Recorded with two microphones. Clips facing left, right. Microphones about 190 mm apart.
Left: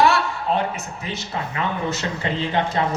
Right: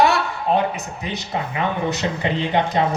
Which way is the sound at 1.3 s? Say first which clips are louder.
Right 3 dB; 20° right (ahead or behind).